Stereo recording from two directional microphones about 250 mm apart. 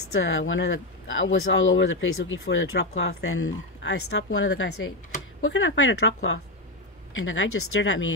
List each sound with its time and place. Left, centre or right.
0.1 s speech: left